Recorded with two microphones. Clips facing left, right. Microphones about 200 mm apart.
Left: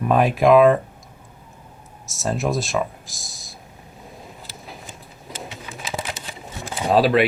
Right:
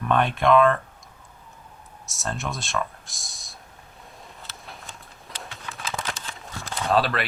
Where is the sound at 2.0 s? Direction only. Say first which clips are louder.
Left 8 dB; centre (ahead or behind).